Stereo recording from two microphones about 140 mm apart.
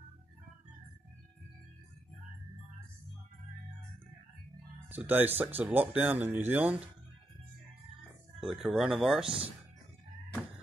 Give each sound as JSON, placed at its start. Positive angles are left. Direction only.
{"t": 4.8, "sound": "speech", "side_deg": -15}
{"t": 8.4, "sound": "speech", "side_deg": 0}